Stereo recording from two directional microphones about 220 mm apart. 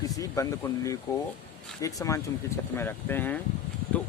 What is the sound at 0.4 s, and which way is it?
Speech, 15° left (ahead or behind).